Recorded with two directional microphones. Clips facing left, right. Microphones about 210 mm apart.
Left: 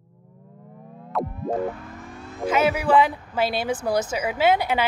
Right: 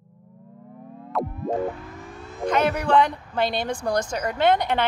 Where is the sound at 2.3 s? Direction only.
5° left (ahead or behind).